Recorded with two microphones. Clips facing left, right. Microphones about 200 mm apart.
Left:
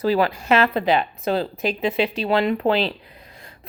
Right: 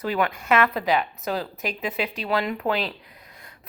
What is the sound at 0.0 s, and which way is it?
A woman's voice, 30° left (ahead or behind).